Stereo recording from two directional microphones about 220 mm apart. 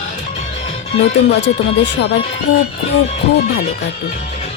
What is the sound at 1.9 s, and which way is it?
Speech, 50° left (ahead or behind).